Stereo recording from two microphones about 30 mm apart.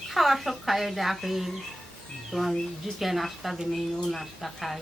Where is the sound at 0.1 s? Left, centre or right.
Centre.